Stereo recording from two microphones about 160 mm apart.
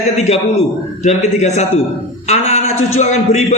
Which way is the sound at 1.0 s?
45° left (ahead or behind).